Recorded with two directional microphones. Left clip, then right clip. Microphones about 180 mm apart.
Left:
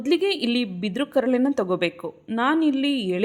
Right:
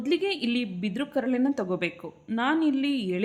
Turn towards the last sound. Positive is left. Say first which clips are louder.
# left 4 dB
turn(degrees=30)  # may be behind; listen again after turning